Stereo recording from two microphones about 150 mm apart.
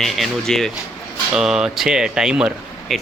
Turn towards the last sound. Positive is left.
turn(degrees=0)  # may be behind; listen again after turning